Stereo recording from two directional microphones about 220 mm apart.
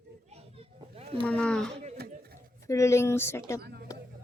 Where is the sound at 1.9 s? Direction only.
45° right (ahead or behind).